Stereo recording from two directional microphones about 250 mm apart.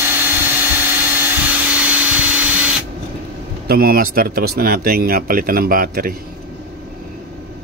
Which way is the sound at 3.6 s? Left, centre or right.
Right.